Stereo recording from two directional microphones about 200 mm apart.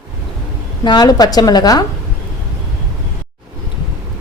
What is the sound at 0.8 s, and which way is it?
A woman's voice, 20° left (ahead or behind).